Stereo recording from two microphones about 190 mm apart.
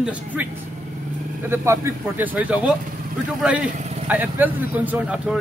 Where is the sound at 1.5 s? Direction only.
15° right (ahead or behind).